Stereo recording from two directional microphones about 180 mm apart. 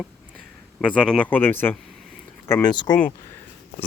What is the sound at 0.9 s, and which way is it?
Speech, 5° left (ahead or behind).